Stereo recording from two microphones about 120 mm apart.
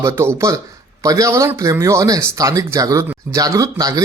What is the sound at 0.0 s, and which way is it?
Speech, 20° right (ahead or behind).